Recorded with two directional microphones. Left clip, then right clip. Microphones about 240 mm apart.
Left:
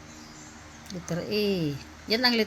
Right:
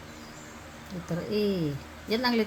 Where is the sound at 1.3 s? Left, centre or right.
Left.